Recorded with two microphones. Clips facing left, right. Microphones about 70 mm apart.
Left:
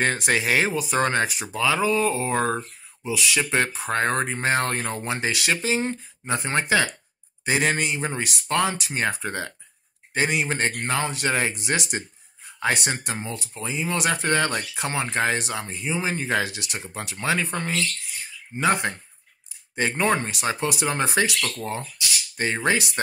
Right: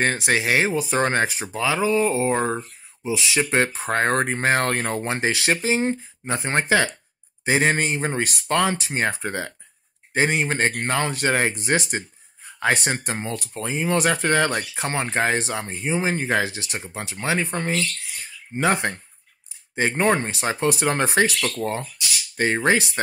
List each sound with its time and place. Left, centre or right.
0.1 s speech: centre
3.1 s speech: right
5.1 s speech: right
8.7 s speech: right
13.2 s speech: right